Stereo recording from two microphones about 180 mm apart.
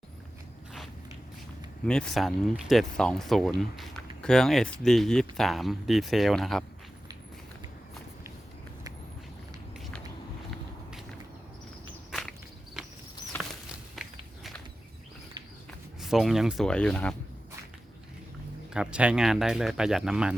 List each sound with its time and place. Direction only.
1.8 s speech: 5° left (ahead or behind)
9.7 s walk: centre (ahead or behind)
13.7 s walk: 5° right (ahead or behind)
16.0 s speech: centre (ahead or behind)
18.7 s speech: 5° right (ahead or behind)